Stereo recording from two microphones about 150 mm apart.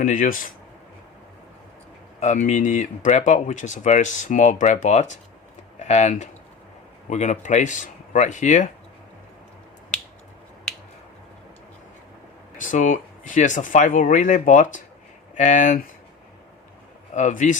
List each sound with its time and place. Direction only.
0.0 s speech: 60° left (ahead or behind)
2.2 s speech: 55° left (ahead or behind)
12.5 s speech: 60° left (ahead or behind)
17.2 s speech: 55° left (ahead or behind)